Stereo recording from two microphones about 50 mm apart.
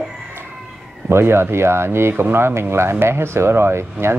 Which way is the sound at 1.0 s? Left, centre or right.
Right.